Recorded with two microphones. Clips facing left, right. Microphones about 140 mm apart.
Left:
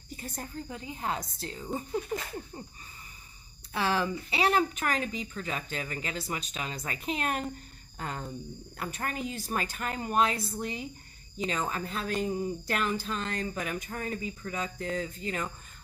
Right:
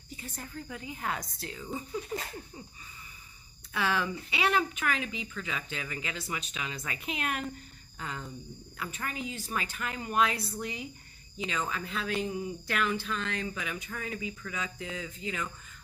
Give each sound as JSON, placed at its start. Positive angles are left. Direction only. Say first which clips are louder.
{"t": 0.2, "sound": "a woman's voice", "louder": "left 3 dB", "side_deg": 35}
{"t": 3.7, "sound": "a woman's voice", "louder": "left 2 dB", "side_deg": 35}